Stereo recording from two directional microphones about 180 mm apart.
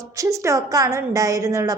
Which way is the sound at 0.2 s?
15° right (ahead or behind).